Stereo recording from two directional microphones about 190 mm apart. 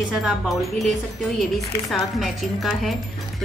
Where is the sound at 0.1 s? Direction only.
5° right (ahead or behind).